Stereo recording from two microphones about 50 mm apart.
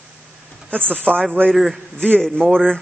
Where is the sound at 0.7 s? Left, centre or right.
Right.